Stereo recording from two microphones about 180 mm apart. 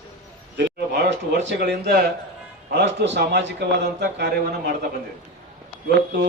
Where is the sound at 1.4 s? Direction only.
70° right (ahead or behind).